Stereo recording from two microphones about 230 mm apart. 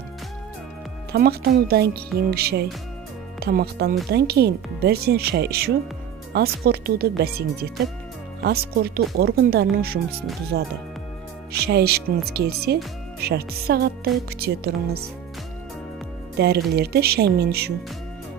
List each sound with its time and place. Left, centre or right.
1.1 s speech: right
16.3 s speech: right